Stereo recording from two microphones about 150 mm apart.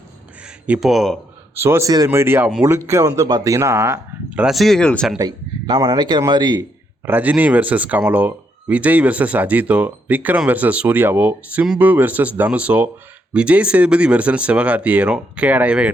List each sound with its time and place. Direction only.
0.4 s speech: 5° right (ahead or behind)
1.5 s speech: 15° right (ahead or behind); by 5.1 s 5° left (ahead or behind)
5.1 s speech: 25° right (ahead or behind)
7.0 s speech: 10° right (ahead or behind)